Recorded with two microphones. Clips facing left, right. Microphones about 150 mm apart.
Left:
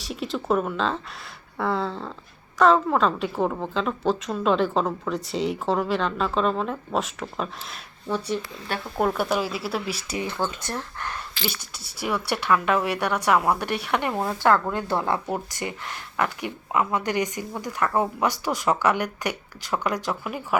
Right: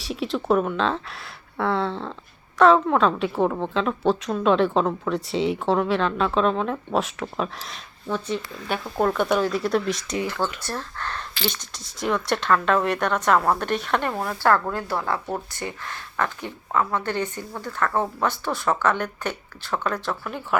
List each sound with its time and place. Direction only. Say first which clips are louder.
0.0 s a woman's voice: right 3 dB; centre (ahead or behind)
10.2 s a woman's voice: left 2 dB; 20° left (ahead or behind)